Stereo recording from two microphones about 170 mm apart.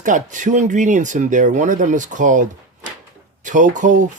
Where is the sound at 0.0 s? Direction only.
50° right (ahead or behind).